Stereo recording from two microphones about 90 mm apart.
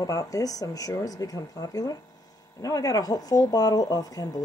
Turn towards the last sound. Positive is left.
turn(degrees=45)  # may be behind; listen again after turning